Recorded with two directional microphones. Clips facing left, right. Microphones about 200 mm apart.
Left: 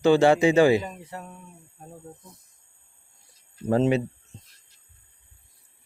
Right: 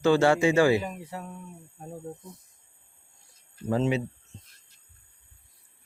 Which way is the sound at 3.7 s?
55° left (ahead or behind).